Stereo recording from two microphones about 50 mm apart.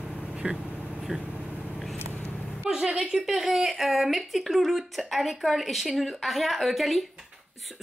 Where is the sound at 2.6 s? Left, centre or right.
Centre.